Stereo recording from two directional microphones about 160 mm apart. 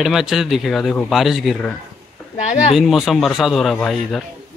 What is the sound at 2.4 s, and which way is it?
Speech, 45° left (ahead or behind).